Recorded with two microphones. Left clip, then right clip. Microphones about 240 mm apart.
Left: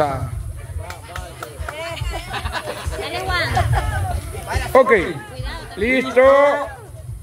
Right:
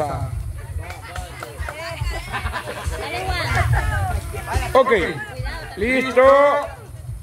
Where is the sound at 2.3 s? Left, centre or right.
Left.